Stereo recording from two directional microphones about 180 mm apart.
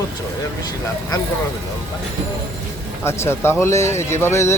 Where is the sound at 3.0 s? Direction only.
15° left (ahead or behind).